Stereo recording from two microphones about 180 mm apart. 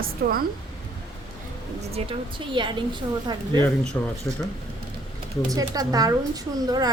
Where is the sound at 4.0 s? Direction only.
15° left (ahead or behind).